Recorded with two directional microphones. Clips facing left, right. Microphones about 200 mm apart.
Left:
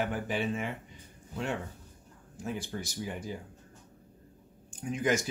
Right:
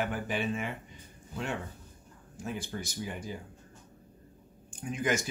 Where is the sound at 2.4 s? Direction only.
35° left (ahead or behind).